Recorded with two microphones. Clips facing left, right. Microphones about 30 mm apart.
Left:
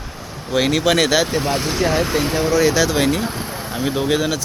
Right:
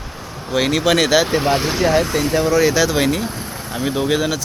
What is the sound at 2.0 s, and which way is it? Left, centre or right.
A man's voice, centre.